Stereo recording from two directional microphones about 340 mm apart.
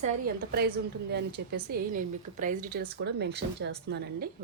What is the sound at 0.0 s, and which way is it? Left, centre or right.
Speech, right.